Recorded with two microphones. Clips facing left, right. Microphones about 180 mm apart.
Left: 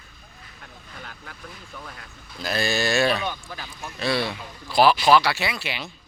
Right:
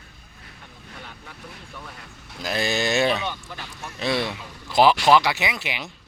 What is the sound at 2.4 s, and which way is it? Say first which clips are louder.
Speech: even; 15° right (ahead or behind).